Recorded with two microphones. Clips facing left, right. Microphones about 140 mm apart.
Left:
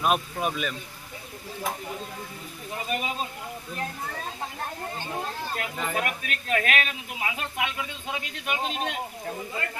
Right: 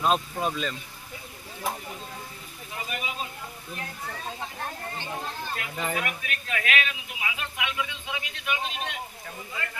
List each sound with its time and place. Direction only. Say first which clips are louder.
0.0 s speech: even; 10° left (ahead or behind)
2.9 s a man's voice: left 6 dB; 40° left (ahead or behind)
5.6 s a man's voice: left 2 dB; 40° left (ahead or behind)